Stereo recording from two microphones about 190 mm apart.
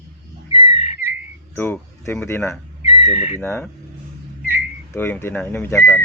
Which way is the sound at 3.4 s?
10° left (ahead or behind).